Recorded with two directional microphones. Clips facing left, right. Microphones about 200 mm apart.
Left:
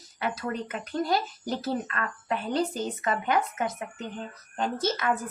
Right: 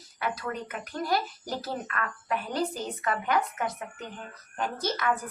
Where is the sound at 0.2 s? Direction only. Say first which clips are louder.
Left 2 dB; 25° left (ahead or behind).